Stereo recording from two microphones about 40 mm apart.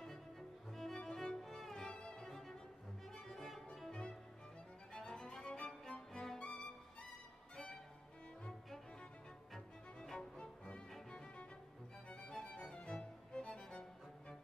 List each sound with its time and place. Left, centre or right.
0.7 s music: centre
2.0 s violin: left
2.2 s music: centre
6.4 s violin: left
9.9 s music: centre